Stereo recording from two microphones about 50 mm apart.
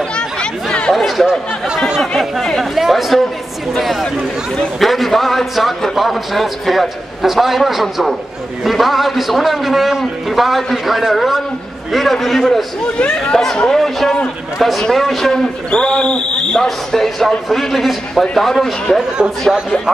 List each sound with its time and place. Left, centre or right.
0.1 s chatter: centre
0.9 s a man's voice: centre
12.9 s speech: centre
13.7 s a man's voice: centre
15.7 s a man's voice: centre